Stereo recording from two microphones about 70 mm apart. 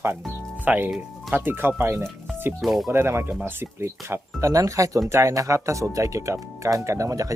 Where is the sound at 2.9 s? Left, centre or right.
Right.